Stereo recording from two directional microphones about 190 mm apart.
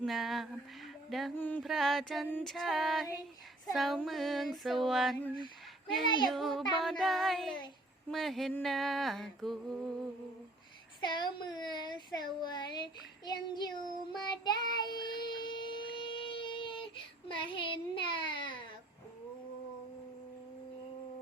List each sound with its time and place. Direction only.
0.0 s music: centre (ahead or behind)
5.9 s speech: 25° left (ahead or behind)
6.3 s music: centre (ahead or behind)
11.0 s speech: 25° left (ahead or behind)
15.3 s a sound: 25° left (ahead or behind)